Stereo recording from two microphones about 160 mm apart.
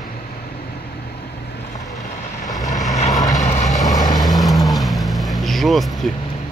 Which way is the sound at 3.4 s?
45° left (ahead or behind).